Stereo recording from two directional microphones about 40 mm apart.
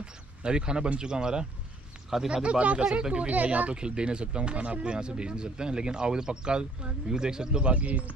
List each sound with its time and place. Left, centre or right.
0.0 s speech: right
3.3 s speech: right
7.7 s speech: right